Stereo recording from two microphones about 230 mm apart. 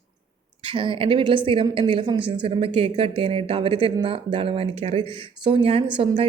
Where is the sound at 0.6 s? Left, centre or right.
Right.